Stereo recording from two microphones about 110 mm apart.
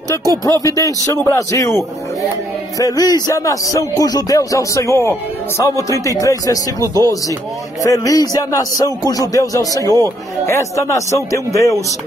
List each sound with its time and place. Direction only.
0.5 s speech: 30° left (ahead or behind)